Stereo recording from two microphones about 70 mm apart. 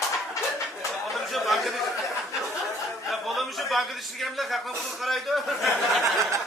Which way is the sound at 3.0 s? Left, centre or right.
Centre.